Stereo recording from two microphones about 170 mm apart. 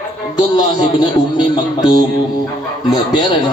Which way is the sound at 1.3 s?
25° left (ahead or behind).